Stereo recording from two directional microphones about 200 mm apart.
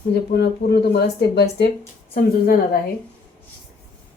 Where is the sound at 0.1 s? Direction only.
55° left (ahead or behind).